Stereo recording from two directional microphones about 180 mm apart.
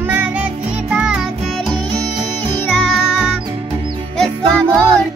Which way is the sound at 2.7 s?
Centre (ahead or behind).